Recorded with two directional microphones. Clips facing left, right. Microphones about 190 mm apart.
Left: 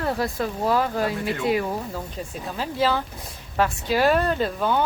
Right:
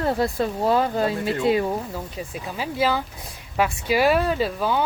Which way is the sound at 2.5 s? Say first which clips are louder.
Even; 10° right (ahead or behind).